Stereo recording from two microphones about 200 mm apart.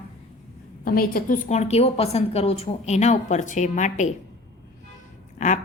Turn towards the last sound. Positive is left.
turn(degrees=40)  # may be behind; listen again after turning